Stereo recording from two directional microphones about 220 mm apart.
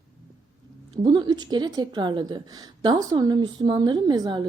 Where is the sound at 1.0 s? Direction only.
20° right (ahead or behind).